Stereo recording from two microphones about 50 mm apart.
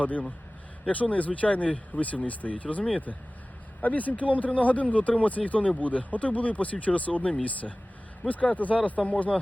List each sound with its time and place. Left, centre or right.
0.0 s speech: left